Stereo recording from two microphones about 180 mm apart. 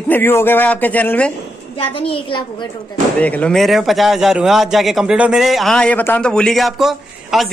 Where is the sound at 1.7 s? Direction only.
30° left (ahead or behind).